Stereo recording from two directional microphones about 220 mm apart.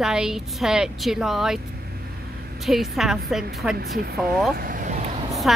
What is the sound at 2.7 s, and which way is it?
Speech, centre (ahead or behind).